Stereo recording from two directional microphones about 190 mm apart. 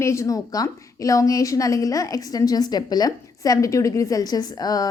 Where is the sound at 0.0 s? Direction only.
15° left (ahead or behind).